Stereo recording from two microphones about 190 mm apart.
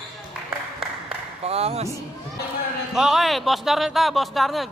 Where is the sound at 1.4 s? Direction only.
30° right (ahead or behind).